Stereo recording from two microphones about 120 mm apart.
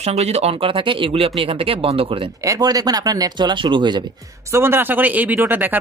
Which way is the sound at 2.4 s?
30° right (ahead or behind).